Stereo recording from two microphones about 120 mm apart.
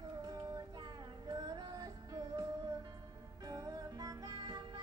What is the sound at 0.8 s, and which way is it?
Music, 30° right (ahead or behind).